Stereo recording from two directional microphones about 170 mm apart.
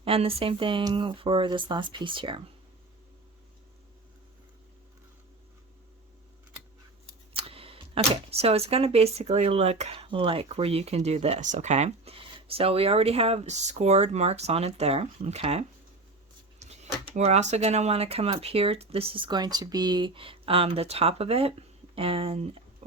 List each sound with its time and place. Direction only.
0.0 s speech: 35° right (ahead or behind)
7.3 s speech: 35° right (ahead or behind)